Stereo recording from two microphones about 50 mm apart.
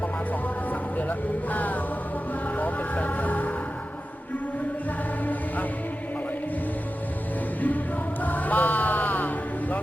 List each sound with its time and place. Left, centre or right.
1.5 s music: left
2.6 s vehicle: left
8.2 s a sound: left